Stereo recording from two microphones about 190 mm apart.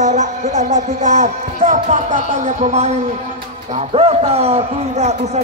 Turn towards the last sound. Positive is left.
turn(degrees=-35)  # may be behind; listen again after turning